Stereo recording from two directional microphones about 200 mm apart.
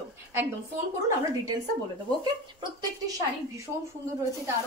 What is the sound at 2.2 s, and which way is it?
Speech, 20° right (ahead or behind).